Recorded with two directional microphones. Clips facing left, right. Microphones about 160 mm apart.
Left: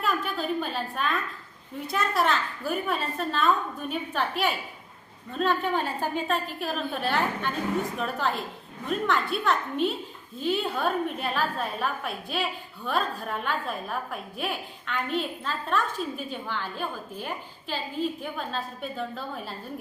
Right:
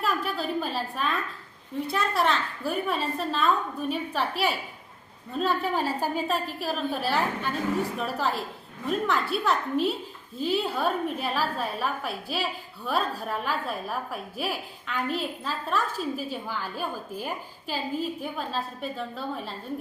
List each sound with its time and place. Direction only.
0.0 s a woman's voice: centre (ahead or behind)